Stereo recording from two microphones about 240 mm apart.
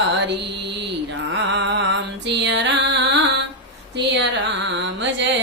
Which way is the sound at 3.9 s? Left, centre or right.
Right.